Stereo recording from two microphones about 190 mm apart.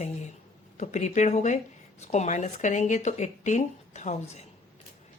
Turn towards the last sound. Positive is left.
turn(degrees=35)  # may be behind; listen again after turning